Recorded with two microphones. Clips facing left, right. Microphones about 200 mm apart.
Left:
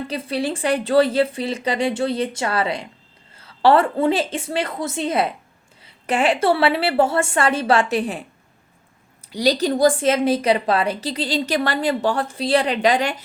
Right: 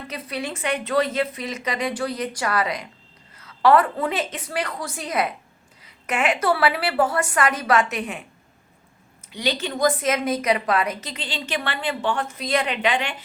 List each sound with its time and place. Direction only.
0.1 s a woman's voice: 30° left (ahead or behind)
9.3 s a woman's voice: 40° left (ahead or behind)